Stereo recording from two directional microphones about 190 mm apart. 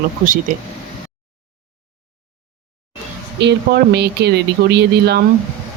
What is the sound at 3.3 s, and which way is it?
Speech, 65° right (ahead or behind).